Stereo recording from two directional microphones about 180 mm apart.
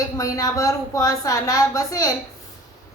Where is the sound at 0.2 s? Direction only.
20° left (ahead or behind).